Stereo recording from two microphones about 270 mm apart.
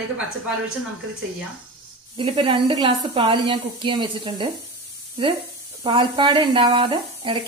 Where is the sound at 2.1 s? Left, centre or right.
Right.